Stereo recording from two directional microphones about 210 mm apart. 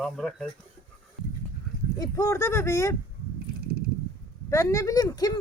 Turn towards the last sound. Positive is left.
turn(degrees=15)  # may be behind; listen again after turning